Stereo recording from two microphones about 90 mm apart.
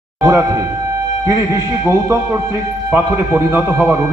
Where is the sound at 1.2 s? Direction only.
35° right (ahead or behind).